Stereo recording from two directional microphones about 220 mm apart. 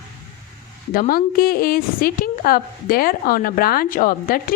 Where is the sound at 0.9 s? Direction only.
40° left (ahead or behind).